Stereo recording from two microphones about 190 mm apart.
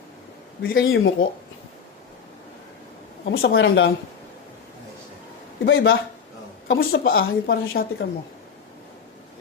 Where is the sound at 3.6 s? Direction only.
75° left (ahead or behind).